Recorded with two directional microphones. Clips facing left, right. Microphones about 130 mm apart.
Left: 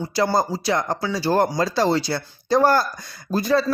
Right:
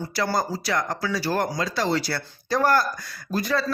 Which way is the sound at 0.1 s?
25° left (ahead or behind).